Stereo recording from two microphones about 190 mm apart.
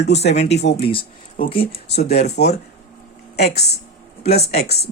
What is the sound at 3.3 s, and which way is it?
Speech, 60° left (ahead or behind).